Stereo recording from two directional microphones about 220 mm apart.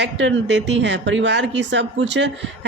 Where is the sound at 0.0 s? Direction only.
55° right (ahead or behind).